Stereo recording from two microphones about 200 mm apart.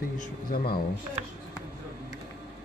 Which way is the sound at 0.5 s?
50° left (ahead or behind).